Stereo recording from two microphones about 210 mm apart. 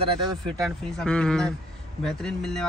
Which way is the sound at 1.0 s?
5° left (ahead or behind).